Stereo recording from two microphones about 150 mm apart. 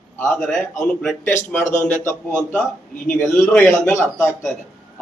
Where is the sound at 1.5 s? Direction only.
15° left (ahead or behind).